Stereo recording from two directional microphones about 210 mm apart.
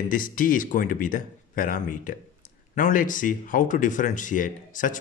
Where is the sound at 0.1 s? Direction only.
40° left (ahead or behind).